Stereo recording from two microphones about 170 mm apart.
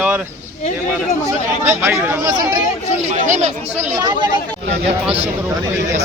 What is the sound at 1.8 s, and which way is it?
Speech, 15° right (ahead or behind).